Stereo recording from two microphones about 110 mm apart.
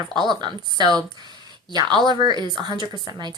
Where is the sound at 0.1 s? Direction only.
40° right (ahead or behind).